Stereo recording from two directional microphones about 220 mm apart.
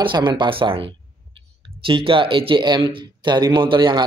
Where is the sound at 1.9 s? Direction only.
25° right (ahead or behind).